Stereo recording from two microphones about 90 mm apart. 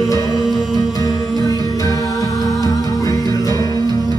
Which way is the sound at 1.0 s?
45° left (ahead or behind).